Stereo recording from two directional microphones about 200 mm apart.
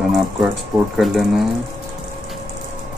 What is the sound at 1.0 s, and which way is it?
Speech, centre (ahead or behind).